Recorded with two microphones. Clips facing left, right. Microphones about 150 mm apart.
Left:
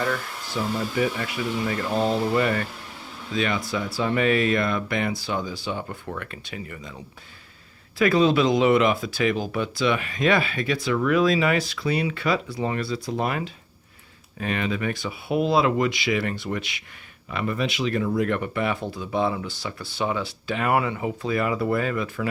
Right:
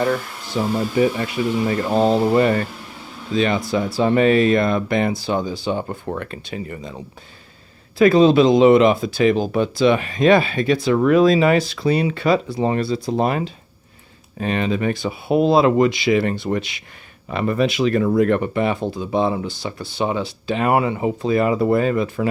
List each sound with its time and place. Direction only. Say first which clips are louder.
0.0 s speech: right 6 dB; 35° right (ahead or behind)
17.2 s speech: right 7 dB; 40° right (ahead or behind)
18.3 s speech: right 6 dB; 30° right (ahead or behind)